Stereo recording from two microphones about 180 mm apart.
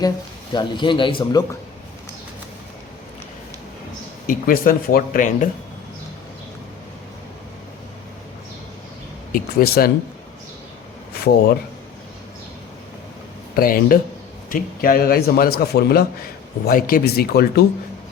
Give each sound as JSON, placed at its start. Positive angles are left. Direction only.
{"t": 0.5, "sound": "a man's voice", "side_deg": 25}
{"t": 4.3, "sound": "speech", "side_deg": 50}
{"t": 9.3, "sound": "a man's voice", "side_deg": 55}
{"t": 11.1, "sound": "speech", "side_deg": 60}
{"t": 13.6, "sound": "a man's voice", "side_deg": 55}